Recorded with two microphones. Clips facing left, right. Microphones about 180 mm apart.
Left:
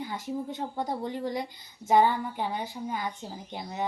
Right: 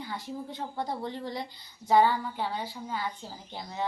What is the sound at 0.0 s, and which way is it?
A woman's voice, 20° left (ahead or behind).